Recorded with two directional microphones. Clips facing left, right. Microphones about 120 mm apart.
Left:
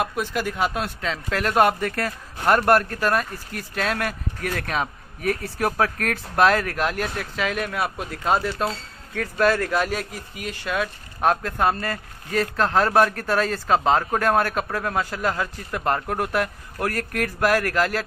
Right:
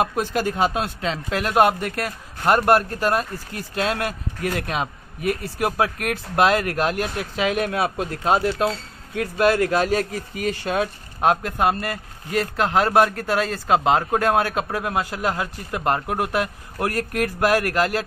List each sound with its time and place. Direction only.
0.0 s speech: 30° right (ahead or behind)
9.9 s speech: 40° right (ahead or behind)
11.1 s speech: 20° right (ahead or behind)